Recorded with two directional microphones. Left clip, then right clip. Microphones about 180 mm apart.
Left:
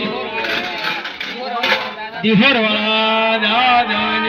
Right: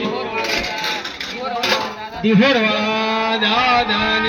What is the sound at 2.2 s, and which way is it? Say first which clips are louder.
Speech: left 1 dB; 60° right (ahead or behind).